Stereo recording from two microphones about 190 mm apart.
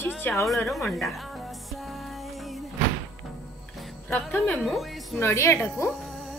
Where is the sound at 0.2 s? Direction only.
5° left (ahead or behind).